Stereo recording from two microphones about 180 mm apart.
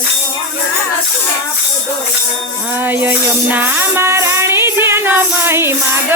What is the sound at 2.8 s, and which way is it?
Music, 10° right (ahead or behind).